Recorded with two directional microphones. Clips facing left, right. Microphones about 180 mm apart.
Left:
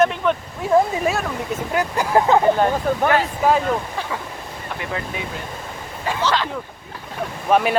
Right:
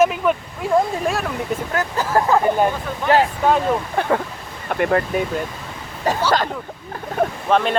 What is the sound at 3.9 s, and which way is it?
Speech, 55° right (ahead or behind).